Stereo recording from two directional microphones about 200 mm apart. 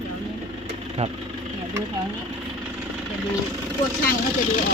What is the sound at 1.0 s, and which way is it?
Speech, 30° right (ahead or behind).